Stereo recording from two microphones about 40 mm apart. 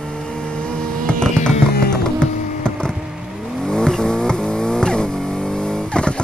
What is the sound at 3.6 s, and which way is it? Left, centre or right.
Vehicle, centre.